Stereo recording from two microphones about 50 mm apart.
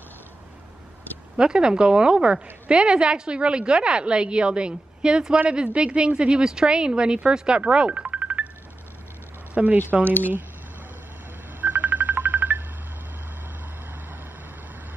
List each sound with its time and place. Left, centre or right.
1.3 s a woman's voice: centre; by 8.5 s right
9.5 s a woman's voice: right
11.6 s ringtone: right